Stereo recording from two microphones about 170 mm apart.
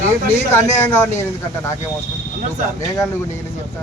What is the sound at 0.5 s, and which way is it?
Speech, 15° left (ahead or behind).